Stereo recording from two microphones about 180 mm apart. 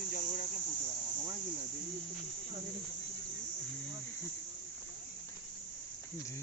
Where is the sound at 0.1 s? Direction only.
50° left (ahead or behind).